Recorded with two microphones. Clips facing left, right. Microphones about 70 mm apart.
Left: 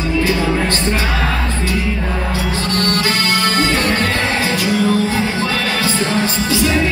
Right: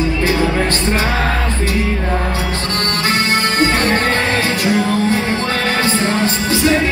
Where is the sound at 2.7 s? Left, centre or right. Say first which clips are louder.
Left 1 dB; right.